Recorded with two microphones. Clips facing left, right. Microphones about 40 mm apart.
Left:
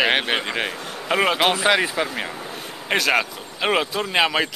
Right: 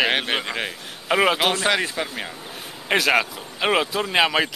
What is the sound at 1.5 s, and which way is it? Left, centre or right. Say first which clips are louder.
Speech: left 3 dB; centre.